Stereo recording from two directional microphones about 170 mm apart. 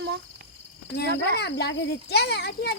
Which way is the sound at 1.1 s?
85° left.